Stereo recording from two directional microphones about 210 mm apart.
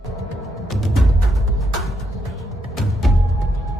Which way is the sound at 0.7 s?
Centre (ahead or behind).